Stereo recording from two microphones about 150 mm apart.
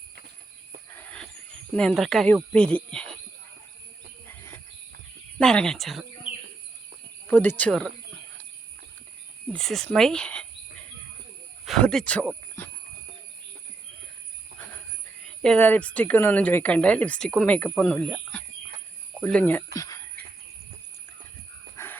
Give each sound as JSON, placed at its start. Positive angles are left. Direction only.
{"t": 0.9, "sound": "a sound", "side_deg": 10}
{"t": 1.7, "sound": "speech", "side_deg": 5}
{"t": 4.3, "sound": "a sound", "side_deg": 15}
{"t": 5.4, "sound": "speech", "side_deg": 5}
{"t": 7.3, "sound": "a woman's voice", "side_deg": 10}
{"t": 9.5, "sound": "speech", "side_deg": 5}
{"t": 11.6, "sound": "cricket", "side_deg": 0}
{"t": 12.6, "sound": "a sound", "side_deg": 15}
{"t": 15.4, "sound": "a woman's voice", "side_deg": 5}
{"t": 18.1, "sound": "chicken", "side_deg": 10}
{"t": 19.2, "sound": "a woman's voice", "side_deg": 10}
{"t": 19.7, "sound": "cricket", "side_deg": 20}
{"t": 21.8, "sound": "dog", "side_deg": 20}